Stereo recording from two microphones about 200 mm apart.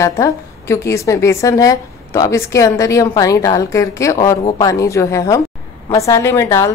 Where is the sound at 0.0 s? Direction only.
15° left (ahead or behind).